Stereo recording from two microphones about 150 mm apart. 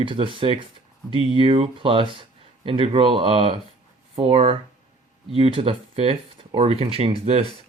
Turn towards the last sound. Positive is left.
turn(degrees=-40)  # may be behind; listen again after turning